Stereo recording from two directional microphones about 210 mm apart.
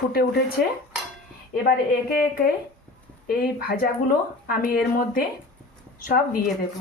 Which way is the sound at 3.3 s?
45° left (ahead or behind).